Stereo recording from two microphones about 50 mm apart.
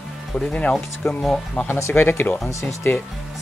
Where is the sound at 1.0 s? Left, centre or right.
Centre.